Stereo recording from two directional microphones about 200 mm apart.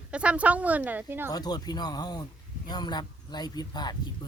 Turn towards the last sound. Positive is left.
turn(degrees=20)  # may be behind; listen again after turning